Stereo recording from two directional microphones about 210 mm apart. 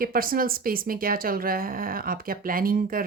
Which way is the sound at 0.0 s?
45° right (ahead or behind).